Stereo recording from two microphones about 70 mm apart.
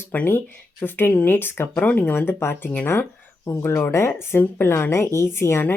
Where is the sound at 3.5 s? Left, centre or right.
Left.